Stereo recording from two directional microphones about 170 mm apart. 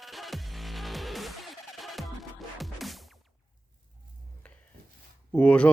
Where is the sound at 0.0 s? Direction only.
Centre (ahead or behind).